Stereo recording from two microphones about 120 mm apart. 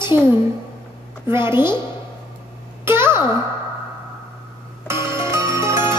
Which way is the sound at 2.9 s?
20° right (ahead or behind).